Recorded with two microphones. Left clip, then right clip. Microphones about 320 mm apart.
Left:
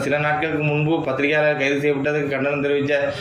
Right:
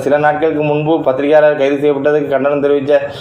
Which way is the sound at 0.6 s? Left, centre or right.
Right.